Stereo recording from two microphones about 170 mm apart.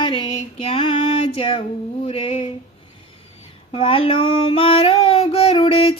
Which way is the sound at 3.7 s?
30° left (ahead or behind).